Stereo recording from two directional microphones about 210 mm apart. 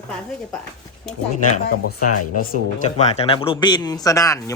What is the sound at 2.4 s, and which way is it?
Speech, 45° left (ahead or behind).